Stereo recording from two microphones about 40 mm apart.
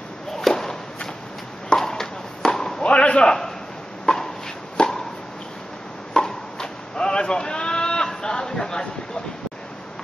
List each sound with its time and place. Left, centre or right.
0.4 s walk: centre
1.8 s chop: centre
2.8 s a sound: left
4.0 s chopping: centre
4.7 s a sound: centre
6.1 s sheep: centre